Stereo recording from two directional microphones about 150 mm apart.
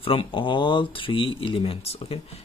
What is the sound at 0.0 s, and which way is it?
Speech, 40° left (ahead or behind).